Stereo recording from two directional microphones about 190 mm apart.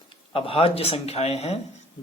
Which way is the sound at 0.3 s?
30° left (ahead or behind).